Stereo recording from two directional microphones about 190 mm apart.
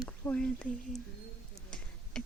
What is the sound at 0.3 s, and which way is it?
Speech, 5° left (ahead or behind).